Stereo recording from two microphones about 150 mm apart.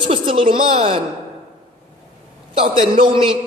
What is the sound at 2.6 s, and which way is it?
Speech, 35° right (ahead or behind).